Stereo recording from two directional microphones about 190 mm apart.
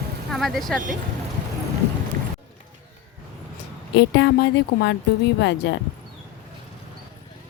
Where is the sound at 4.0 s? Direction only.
65° left (ahead or behind).